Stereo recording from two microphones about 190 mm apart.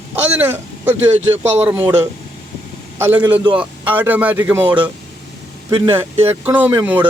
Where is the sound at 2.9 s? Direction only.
10° right (ahead or behind).